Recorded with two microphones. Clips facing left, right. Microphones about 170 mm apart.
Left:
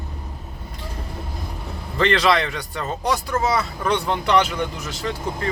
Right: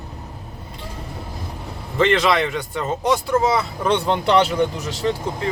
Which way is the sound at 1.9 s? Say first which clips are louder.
Right 1 dB; 20° right (ahead or behind).